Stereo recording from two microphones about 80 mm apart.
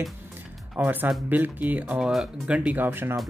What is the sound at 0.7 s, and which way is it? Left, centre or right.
Speech, right.